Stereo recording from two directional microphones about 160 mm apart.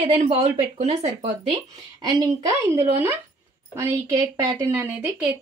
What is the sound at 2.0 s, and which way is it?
A woman's voice, 20° right (ahead or behind).